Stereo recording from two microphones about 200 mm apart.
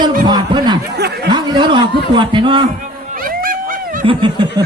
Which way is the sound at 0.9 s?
55° right (ahead or behind).